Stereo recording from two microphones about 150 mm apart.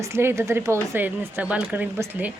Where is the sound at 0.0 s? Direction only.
15° right (ahead or behind).